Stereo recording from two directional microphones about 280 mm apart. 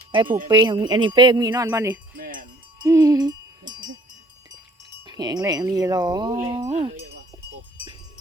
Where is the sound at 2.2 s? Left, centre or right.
Right.